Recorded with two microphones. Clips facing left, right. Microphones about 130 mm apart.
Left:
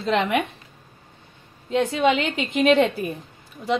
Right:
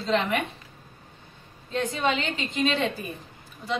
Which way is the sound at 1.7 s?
75° left (ahead or behind).